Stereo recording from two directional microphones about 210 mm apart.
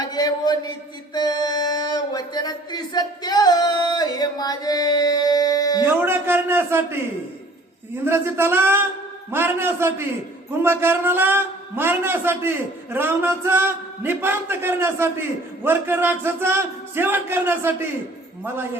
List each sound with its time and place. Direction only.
0.0 s a sound: 20° left (ahead or behind)
5.8 s a man's voice: 10° right (ahead or behind)
8.0 s a man's voice: 10° right (ahead or behind)